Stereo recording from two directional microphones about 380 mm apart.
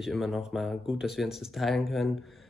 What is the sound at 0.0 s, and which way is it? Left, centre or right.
Speech, centre.